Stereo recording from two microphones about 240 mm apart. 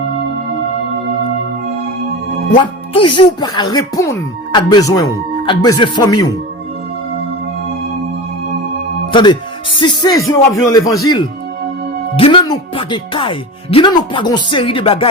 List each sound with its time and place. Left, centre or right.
2.6 s speech: centre
9.1 s speech: centre
12.1 s speech: left